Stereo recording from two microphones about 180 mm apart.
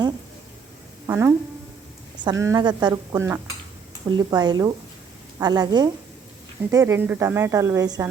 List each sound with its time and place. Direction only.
1.0 s a woman's voice: 15° right (ahead or behind)